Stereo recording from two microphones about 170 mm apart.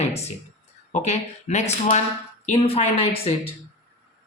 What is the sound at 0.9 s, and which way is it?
Speech, 40° left (ahead or behind).